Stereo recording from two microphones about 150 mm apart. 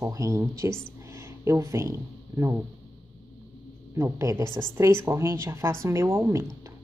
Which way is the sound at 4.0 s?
20° right (ahead or behind).